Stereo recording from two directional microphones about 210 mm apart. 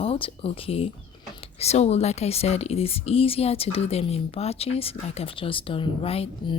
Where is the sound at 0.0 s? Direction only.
25° left (ahead or behind).